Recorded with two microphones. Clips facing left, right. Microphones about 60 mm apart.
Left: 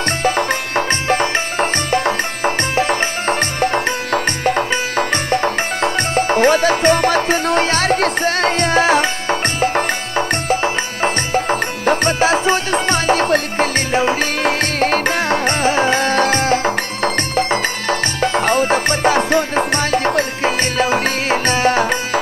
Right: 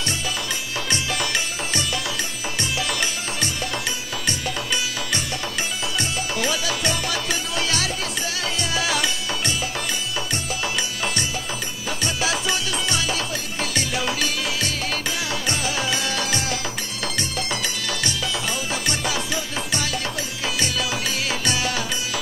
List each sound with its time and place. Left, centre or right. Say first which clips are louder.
0.2 s music: left 11 dB; left